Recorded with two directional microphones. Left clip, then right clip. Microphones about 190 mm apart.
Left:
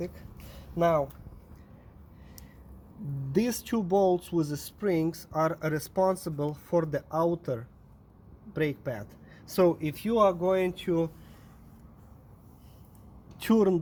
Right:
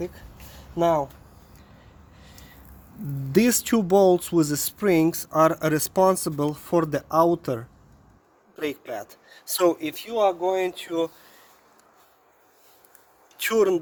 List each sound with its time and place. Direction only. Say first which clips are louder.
0.8 s speech: right 4 dB; 15° right (ahead or behind)
3.3 s speech: right 8 dB; 45° right (ahead or behind)
8.6 s speech: right 3 dB; 40° right (ahead or behind)
13.3 s speech: right 5 dB; 35° right (ahead or behind)